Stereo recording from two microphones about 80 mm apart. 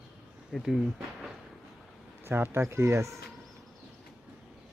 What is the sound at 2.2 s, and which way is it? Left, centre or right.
Speech, right.